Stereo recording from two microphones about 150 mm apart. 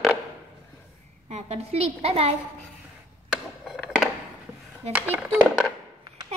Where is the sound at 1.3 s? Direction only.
45° right (ahead or behind).